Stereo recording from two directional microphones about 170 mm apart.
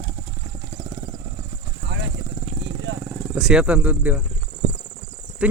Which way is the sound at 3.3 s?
5° right (ahead or behind).